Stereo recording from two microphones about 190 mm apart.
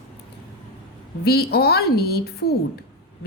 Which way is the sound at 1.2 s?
55° left (ahead or behind).